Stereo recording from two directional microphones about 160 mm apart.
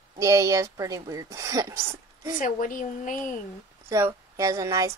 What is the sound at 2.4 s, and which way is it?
Speech, 55° left (ahead or behind).